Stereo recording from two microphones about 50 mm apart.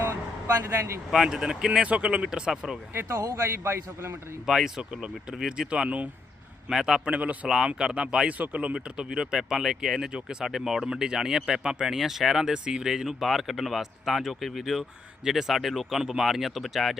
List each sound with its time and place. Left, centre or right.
1.1 s speech: centre
1.8 s speech: right
3.2 s a man's voice: right
4.4 s speech: centre
6.7 s speech: centre
7.0 s speech: right
7.4 s speech: centre
8.3 s speech: right
8.7 s speech: centre
10.1 s speech: centre
10.4 s speech: centre